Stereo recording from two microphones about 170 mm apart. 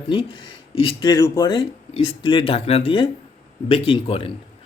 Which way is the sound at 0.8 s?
30° left (ahead or behind).